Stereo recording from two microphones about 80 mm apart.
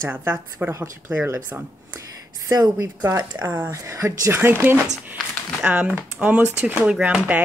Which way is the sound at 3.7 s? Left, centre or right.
Right.